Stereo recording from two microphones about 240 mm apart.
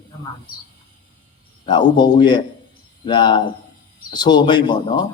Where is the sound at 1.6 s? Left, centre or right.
Centre.